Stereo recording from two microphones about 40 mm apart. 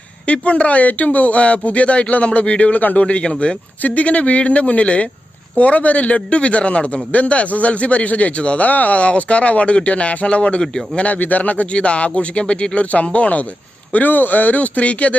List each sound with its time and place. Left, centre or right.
0.3 s a man's voice: left
3.0 s speech: left
3.8 s a man's voice: left
8.6 s a man's voice: left
11.1 s a man's voice: left
13.9 s a man's voice: left